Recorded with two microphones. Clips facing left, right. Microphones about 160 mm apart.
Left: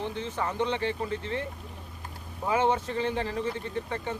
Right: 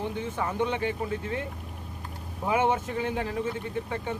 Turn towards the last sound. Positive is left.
turn(degrees=-10)  # may be behind; listen again after turning